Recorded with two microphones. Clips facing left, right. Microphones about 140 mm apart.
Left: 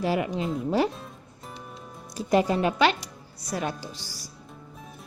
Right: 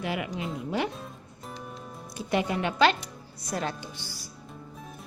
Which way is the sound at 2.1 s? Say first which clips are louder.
Left 5 dB; 35° left (ahead or behind).